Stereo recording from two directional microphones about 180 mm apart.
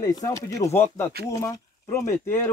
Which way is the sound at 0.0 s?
20° left (ahead or behind).